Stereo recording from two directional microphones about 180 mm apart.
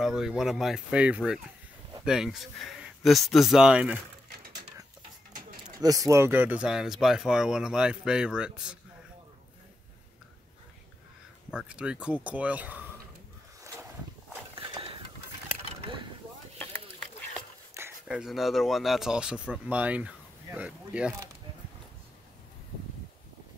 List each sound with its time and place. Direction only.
0.0 s speech: 5° right (ahead or behind)
5.8 s speech: 20° right (ahead or behind)
11.5 s speech: 5° right (ahead or behind)
14.5 s a sound: 30° right (ahead or behind)
17.7 s speech: 10° right (ahead or behind)